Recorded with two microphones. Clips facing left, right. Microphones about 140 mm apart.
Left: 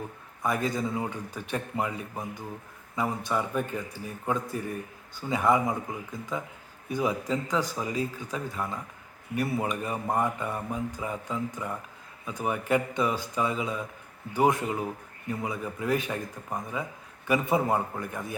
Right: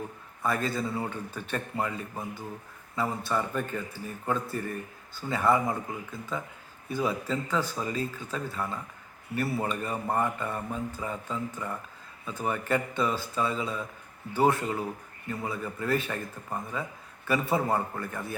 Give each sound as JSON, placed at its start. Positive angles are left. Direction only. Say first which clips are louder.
{"t": 0.4, "sound": "speech", "louder": "left 1 dB", "side_deg": 15}